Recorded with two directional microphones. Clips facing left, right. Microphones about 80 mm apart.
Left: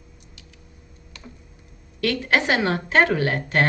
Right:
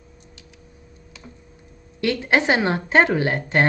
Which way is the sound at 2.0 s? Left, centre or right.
Right.